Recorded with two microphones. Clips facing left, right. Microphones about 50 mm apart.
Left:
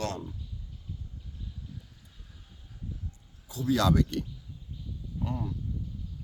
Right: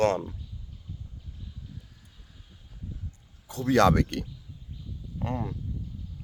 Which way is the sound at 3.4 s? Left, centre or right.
Right.